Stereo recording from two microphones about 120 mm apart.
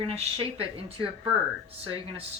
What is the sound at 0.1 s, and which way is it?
Speech, 55° right (ahead or behind).